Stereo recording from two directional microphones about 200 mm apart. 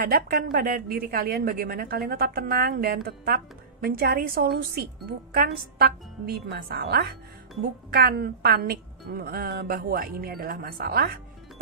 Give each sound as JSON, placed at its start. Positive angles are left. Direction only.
{"t": 0.0, "sound": "a woman's voice", "side_deg": -50}